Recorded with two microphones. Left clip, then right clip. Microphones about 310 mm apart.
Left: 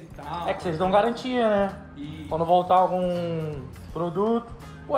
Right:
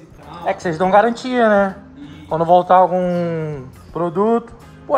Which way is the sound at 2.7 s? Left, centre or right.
Right.